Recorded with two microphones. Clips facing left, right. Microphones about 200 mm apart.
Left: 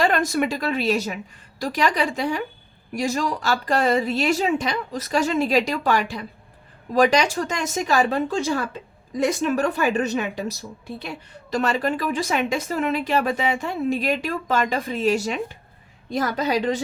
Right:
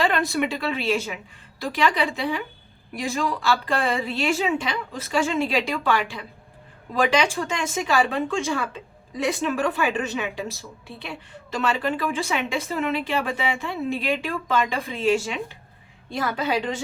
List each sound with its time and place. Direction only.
0.0 s a woman's voice: 45° left (ahead or behind)